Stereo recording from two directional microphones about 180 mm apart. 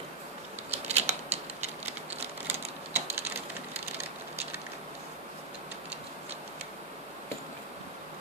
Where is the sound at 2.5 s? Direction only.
15° right (ahead or behind).